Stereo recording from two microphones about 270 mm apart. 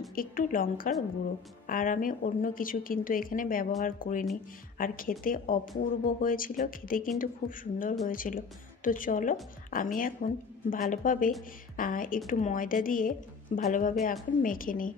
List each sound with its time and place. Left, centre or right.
0.1 s a woman's voice: left